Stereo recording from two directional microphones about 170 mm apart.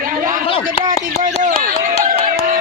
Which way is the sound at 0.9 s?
50° right (ahead or behind).